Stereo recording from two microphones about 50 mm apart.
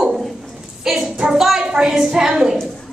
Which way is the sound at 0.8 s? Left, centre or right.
Centre.